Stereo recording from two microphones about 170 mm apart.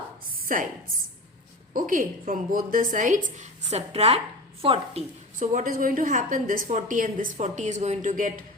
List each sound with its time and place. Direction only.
0.3 s a sound: 55° right (ahead or behind)
1.7 s a woman's voice: 50° right (ahead or behind); by 5.0 s 35° right (ahead or behind)
5.4 s a woman's voice: 50° right (ahead or behind)